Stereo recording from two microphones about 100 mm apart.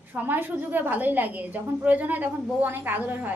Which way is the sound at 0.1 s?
20° right (ahead or behind).